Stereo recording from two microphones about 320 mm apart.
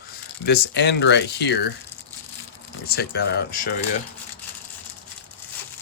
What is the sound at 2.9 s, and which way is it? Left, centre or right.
Speech, left.